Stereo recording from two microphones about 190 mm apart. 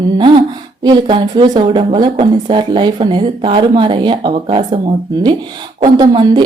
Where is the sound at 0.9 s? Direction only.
25° right (ahead or behind).